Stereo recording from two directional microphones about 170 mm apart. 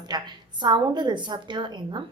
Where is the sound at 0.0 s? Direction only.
25° right (ahead or behind).